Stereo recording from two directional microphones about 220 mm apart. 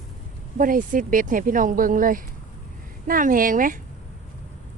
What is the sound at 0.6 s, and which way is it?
A woman's voice, 40° right (ahead or behind).